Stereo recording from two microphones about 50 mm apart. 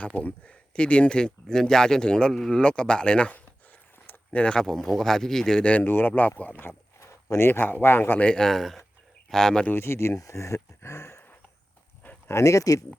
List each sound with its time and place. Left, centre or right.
0.2 s speech: left
4.0 s a sound: left
4.5 s speech: centre
5.8 s speech: left
6.7 s speech: left
8.2 s speech: centre
9.7 s speech: left
12.3 s speech: left